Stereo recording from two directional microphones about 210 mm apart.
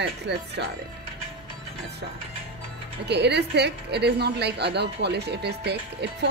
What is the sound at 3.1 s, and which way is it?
A woman's voice, 55° right (ahead or behind).